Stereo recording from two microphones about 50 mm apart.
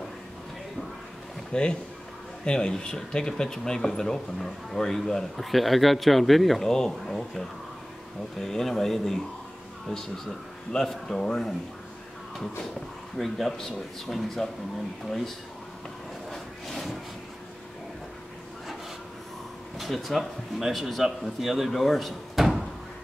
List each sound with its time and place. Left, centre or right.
1.5 s speech: centre
10.7 s speech: centre
13.2 s speech: centre
16.3 s a sound: centre
19.8 s speech: centre